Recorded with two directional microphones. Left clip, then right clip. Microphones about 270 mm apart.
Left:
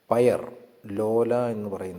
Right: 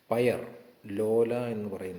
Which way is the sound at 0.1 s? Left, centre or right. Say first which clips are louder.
Left 6 dB; left.